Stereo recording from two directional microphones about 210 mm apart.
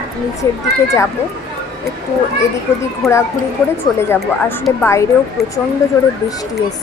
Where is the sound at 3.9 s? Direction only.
10° left (ahead or behind).